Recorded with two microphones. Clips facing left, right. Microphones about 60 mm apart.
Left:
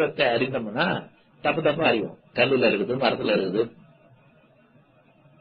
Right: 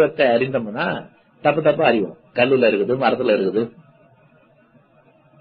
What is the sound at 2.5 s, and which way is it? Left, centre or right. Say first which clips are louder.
Speech: right 6 dB; centre.